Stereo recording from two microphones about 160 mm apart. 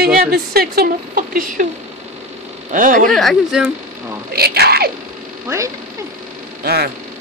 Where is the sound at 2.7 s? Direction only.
55° right (ahead or behind).